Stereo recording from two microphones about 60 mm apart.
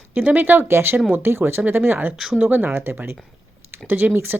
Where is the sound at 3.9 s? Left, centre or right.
Right.